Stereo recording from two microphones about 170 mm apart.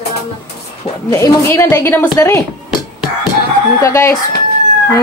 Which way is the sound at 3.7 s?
15° left (ahead or behind).